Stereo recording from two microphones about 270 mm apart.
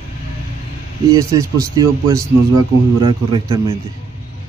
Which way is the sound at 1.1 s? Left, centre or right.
Centre.